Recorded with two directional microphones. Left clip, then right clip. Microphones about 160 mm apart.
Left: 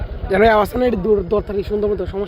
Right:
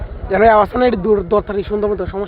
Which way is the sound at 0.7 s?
20° left (ahead or behind).